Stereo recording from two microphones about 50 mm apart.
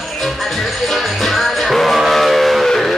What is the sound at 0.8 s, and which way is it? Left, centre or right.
Music, centre.